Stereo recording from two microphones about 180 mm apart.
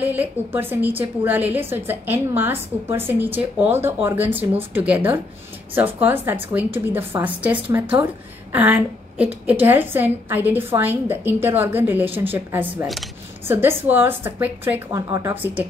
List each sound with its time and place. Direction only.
0.0 s a woman's voice: 10° right (ahead or behind)